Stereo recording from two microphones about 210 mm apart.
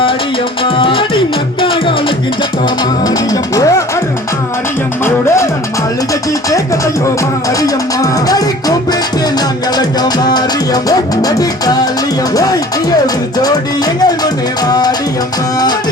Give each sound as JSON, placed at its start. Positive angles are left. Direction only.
{"t": 0.6, "sound": "music", "side_deg": 25}
{"t": 7.6, "sound": "music", "side_deg": 15}